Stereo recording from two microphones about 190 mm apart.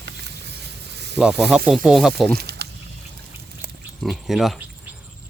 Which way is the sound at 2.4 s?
60° right (ahead or behind).